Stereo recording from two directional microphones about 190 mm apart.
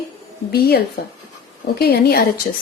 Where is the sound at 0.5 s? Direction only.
55° left (ahead or behind).